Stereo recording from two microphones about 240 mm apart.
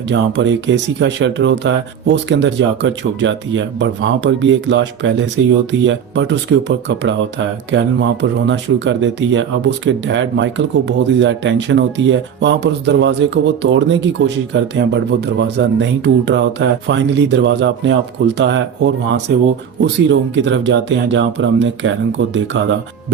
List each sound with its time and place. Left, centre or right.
0.1 s speech: right